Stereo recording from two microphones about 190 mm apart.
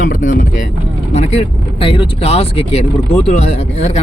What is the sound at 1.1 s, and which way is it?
Speech, 30° left (ahead or behind).